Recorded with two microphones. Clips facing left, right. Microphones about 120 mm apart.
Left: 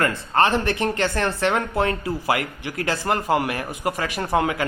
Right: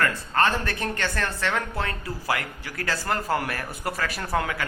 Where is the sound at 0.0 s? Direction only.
30° left (ahead or behind).